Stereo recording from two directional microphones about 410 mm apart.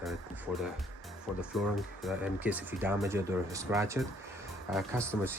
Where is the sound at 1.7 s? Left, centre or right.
Centre.